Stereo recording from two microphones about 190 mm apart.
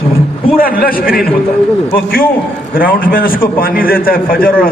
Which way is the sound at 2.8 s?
50° left (ahead or behind).